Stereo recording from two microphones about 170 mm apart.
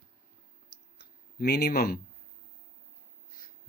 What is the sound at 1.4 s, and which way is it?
Speech, 70° left (ahead or behind).